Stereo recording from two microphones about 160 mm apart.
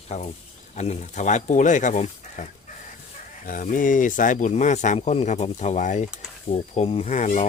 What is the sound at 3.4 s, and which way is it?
Speech, 55° left (ahead or behind).